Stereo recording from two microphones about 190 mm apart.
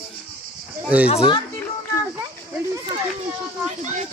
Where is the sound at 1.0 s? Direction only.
30° left (ahead or behind).